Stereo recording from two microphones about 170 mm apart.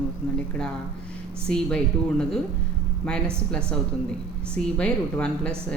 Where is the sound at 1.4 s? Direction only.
5° left (ahead or behind).